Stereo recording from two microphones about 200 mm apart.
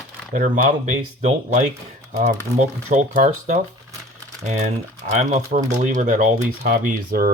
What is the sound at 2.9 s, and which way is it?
Speech, 40° right (ahead or behind).